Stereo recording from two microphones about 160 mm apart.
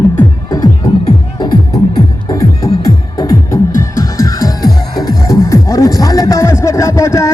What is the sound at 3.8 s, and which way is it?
Music, 20° left (ahead or behind).